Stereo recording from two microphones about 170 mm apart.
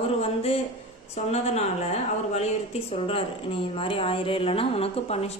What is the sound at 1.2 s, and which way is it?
Speech, 40° left (ahead or behind).